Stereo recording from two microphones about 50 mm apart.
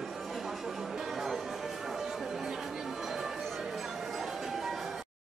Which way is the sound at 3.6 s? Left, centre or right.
Centre.